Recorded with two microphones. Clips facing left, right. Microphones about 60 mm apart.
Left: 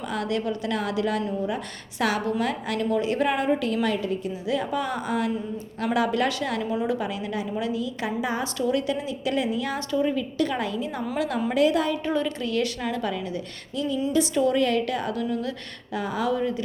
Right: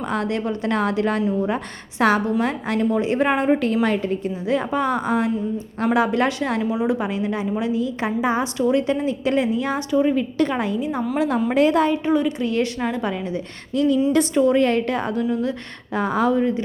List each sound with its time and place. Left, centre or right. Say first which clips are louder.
0.0 s a woman's voice: right 4 dB; right
6.6 s a woman's voice: right 5 dB; centre
11.5 s a woman's voice: right 4 dB; right
12.0 s speech: right 6 dB; centre
12.4 s a woman's voice: right 4 dB; right
13.7 s a woman's voice: right 9 dB; right
14.3 s a woman's voice: right 4 dB; right
16.0 s a woman's voice: right 7 dB; right
16.3 s a woman's voice: right 5 dB; right